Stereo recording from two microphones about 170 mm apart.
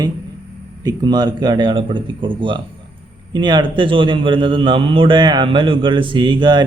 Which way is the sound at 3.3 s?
25° right (ahead or behind).